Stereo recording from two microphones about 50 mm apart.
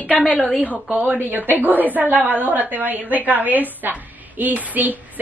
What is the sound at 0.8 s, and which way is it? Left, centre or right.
Speech, right.